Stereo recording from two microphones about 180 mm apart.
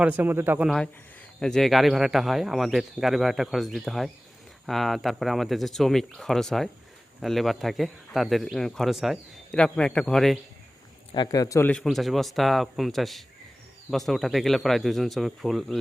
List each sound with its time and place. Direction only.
0.0 s speech: 10° right (ahead or behind)
1.4 s speech: centre (ahead or behind)
11.1 s a man's voice: 20° left (ahead or behind)
11.7 s speech: centre (ahead or behind)